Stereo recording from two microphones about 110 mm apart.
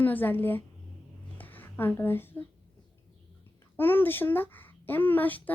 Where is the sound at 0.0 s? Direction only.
15° left (ahead or behind).